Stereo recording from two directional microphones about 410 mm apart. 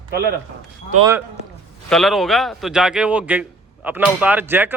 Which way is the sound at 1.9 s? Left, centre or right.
Centre.